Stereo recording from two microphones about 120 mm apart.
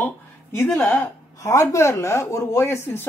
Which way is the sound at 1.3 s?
25° left (ahead or behind).